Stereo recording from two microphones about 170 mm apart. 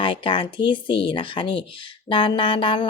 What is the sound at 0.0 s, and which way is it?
Speech, 30° left (ahead or behind).